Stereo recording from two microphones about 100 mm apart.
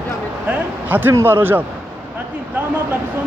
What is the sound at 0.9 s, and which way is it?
Speech, 20° right (ahead or behind).